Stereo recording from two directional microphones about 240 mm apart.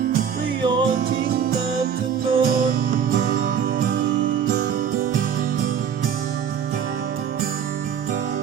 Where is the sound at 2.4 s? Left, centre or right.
Right.